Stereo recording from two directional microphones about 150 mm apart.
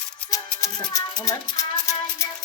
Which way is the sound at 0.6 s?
25° left (ahead or behind).